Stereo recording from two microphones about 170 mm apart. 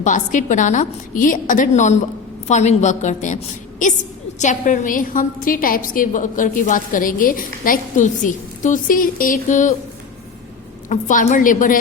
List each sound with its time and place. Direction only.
0.0 s a woman's voice: 45° left (ahead or behind)
4.4 s a woman's voice: 50° left (ahead or behind)
10.8 s a woman's voice: 50° left (ahead or behind)